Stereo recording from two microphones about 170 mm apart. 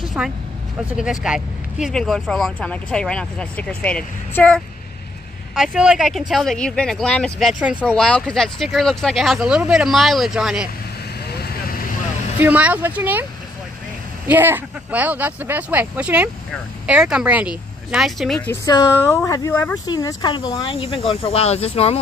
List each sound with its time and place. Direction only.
0.0 s vehicle: 5° right (ahead or behind)
0.9 s speech: 5° right (ahead or behind)
5.5 s speech: 5° right (ahead or behind)
12.4 s speech: 10° right (ahead or behind)
18.7 s speech: 20° left (ahead or behind)